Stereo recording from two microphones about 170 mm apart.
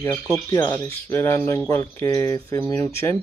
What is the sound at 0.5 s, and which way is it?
Speech, 20° left (ahead or behind).